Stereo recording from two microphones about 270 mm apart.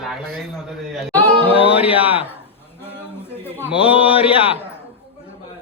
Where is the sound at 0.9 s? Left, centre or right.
Centre.